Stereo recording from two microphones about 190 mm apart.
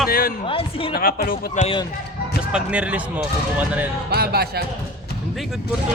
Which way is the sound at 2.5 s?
5° right (ahead or behind).